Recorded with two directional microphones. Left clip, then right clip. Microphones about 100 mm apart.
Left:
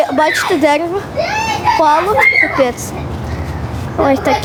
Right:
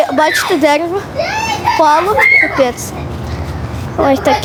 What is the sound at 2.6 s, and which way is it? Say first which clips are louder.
Speech: right 1 dB; 5° right (ahead or behind).